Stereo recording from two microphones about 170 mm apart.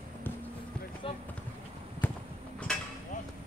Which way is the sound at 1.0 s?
30° left (ahead or behind).